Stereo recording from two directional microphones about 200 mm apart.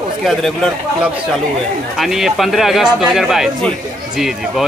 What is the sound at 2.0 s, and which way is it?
Speech, centre (ahead or behind).